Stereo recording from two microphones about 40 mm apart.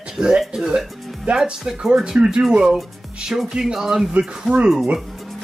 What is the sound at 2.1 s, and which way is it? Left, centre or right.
Speech, right.